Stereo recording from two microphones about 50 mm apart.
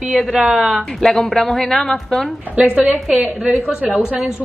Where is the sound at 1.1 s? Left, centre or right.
Centre.